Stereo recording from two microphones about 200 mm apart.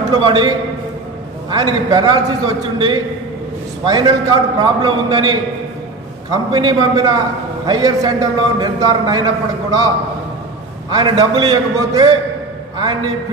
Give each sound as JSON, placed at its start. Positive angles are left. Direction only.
{"t": 0.1, "sound": "a man's voice", "side_deg": -25}
{"t": 1.5, "sound": "a man's voice", "side_deg": -20}
{"t": 10.9, "sound": "a man's voice", "side_deg": -20}